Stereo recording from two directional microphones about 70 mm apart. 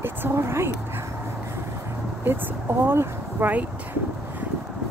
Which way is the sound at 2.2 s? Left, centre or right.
Right.